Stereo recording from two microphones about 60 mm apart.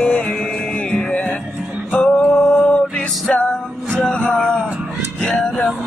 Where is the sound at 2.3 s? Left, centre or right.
Centre.